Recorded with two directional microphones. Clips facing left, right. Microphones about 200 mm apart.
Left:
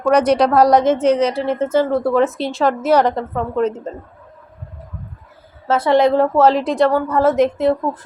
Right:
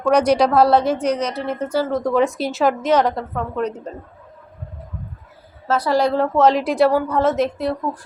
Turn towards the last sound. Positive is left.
turn(degrees=25)  # may be behind; listen again after turning